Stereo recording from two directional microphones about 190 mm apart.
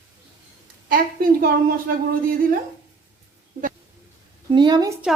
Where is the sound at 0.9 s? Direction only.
50° right (ahead or behind).